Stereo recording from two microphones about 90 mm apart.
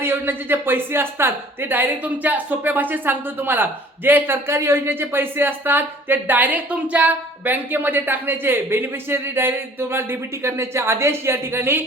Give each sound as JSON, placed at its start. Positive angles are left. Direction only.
{"t": 0.0, "sound": "speech", "side_deg": -25}